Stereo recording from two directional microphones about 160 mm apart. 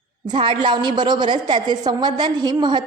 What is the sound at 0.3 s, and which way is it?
A woman's voice, 30° right (ahead or behind).